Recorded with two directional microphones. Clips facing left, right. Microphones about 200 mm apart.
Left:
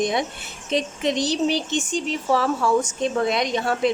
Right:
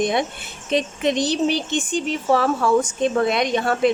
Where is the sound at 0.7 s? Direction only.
55° right (ahead or behind).